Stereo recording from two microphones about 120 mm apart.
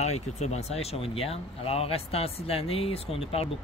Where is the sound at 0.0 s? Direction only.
65° left (ahead or behind).